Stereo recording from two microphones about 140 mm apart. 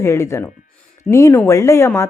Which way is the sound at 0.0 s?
20° left (ahead or behind).